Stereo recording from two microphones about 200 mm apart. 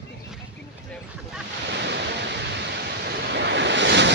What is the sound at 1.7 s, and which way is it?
Waterfall, 55° right (ahead or behind).